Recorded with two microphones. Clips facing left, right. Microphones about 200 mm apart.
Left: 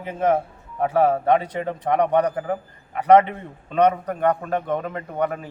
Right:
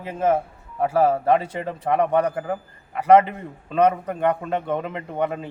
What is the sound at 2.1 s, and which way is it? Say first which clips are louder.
Speech: left 1 dB; 5° right (ahead or behind).